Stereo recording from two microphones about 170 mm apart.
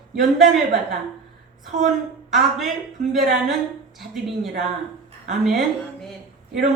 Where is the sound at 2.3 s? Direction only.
Centre (ahead or behind).